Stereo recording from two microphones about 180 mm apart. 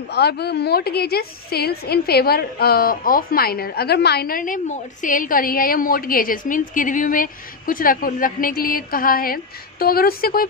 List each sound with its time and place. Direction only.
0.1 s a woman's voice: 65° left (ahead or behind)